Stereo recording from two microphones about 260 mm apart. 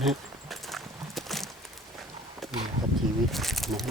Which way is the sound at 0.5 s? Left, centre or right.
Centre.